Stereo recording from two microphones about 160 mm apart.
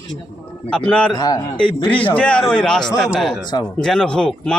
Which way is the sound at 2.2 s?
5° left (ahead or behind).